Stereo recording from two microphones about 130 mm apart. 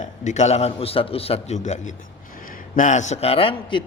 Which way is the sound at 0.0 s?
65° left (ahead or behind).